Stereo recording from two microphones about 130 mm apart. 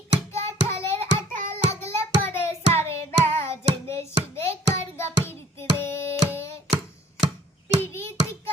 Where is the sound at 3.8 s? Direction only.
20° left (ahead or behind).